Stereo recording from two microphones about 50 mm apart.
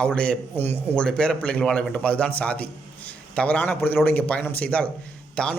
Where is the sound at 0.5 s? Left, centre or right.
Left.